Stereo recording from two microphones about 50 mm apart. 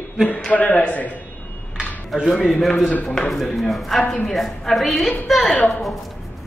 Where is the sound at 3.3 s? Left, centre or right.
Centre.